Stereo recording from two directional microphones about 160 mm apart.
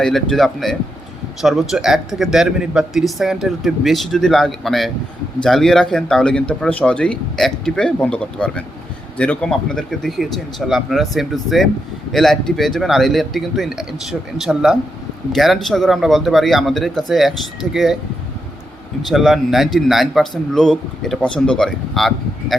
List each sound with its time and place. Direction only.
0.0 s speech: centre (ahead or behind)
19.0 s speech: centre (ahead or behind)